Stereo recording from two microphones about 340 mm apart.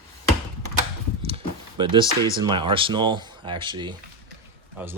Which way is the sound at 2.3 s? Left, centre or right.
Centre.